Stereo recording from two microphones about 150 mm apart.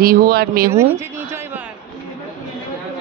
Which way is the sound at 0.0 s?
75° right (ahead or behind).